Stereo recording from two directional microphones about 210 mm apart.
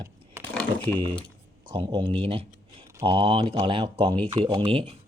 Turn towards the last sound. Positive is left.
turn(degrees=-25)  # may be behind; listen again after turning